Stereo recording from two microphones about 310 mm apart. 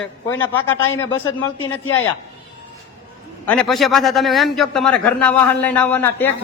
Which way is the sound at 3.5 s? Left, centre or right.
Centre.